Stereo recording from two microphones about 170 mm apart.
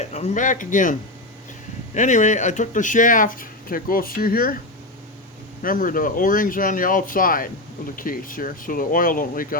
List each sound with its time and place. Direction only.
0.0 s speech: 40° left (ahead or behind); by 4.5 s 60° left (ahead or behind)
5.6 s speech: 55° left (ahead or behind)